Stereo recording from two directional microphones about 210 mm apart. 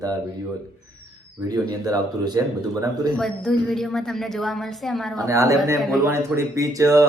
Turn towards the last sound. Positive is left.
turn(degrees=-15)  # may be behind; listen again after turning